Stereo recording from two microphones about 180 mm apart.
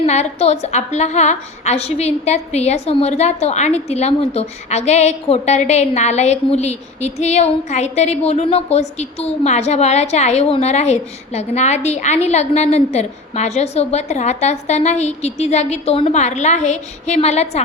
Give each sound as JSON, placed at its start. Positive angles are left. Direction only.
{"t": 0.0, "sound": "a woman's voice", "side_deg": 35}